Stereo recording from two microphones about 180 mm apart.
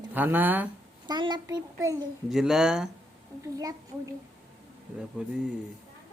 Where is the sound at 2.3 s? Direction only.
Centre (ahead or behind).